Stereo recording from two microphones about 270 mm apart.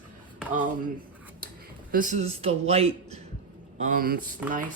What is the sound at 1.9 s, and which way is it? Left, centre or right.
Speech, right.